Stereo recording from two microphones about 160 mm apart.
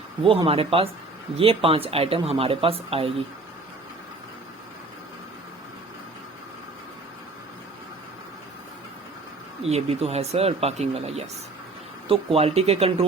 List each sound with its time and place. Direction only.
0.4 s speech: 35° right (ahead or behind)
9.6 s speech: 40° right (ahead or behind)